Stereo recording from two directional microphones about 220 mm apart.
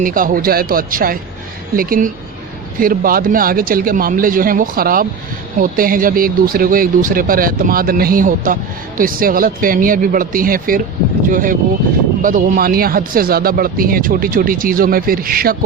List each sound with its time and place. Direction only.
0.0 s speech: 40° right (ahead or behind)